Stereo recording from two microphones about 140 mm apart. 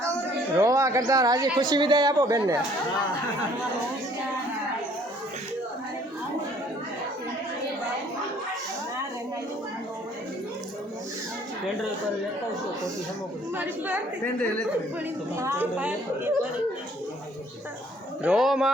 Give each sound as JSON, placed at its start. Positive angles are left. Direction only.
{"t": 0.5, "sound": "speech", "side_deg": -20}
{"t": 13.6, "sound": "a woman's voice", "side_deg": -10}
{"t": 15.4, "sound": "a woman's voice", "side_deg": -20}
{"t": 18.2, "sound": "speech", "side_deg": -5}